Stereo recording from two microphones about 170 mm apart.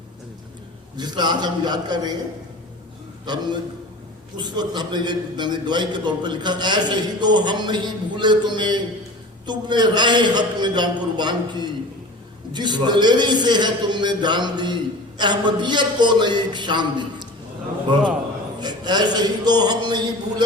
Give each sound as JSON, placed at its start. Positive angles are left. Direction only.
{"t": 0.9, "sound": "a man's voice", "side_deg": -25}
{"t": 3.2, "sound": "a man's voice", "side_deg": -25}
{"t": 18.6, "sound": "a man's voice", "side_deg": -25}